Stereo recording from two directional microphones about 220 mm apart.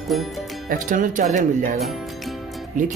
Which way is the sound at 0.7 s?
35° right (ahead or behind).